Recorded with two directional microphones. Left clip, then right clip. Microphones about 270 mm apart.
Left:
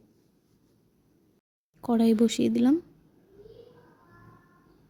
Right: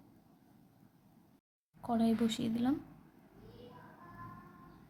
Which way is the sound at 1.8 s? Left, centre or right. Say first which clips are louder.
Left 10 dB; left.